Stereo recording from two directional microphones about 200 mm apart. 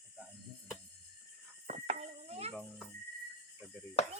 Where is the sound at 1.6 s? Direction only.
35° right (ahead or behind).